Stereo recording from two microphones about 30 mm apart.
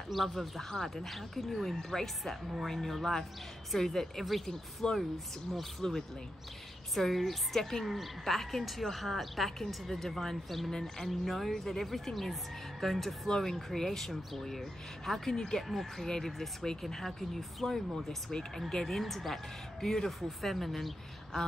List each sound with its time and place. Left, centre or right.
0.1 s speech: centre
1.8 s a woman's voice: centre
4.8 s speech: left
5.8 s a woman's voice: centre
10.7 s a woman's voice: centre
11.1 s a woman's voice: centre
15.3 s speech: left
16.0 s a woman's voice: centre
21.3 s speech: centre